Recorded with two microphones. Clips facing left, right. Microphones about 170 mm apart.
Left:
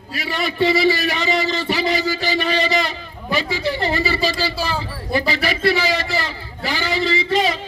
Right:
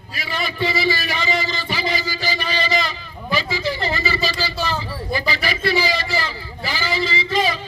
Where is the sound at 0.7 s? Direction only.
70° left (ahead or behind).